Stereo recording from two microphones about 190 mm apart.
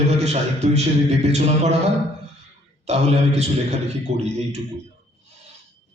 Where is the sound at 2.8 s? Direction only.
35° right (ahead or behind).